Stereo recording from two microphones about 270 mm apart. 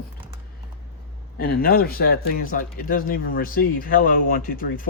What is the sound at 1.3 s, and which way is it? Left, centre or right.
Speech, left.